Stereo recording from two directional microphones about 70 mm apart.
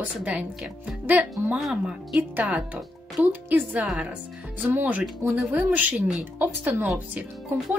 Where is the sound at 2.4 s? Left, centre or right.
Centre.